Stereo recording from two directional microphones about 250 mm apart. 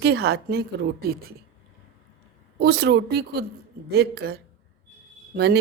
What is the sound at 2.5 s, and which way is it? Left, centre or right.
A woman's voice, right.